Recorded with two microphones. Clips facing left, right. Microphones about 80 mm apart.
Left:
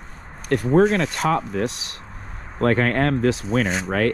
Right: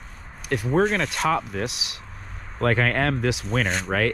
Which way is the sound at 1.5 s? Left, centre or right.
Left.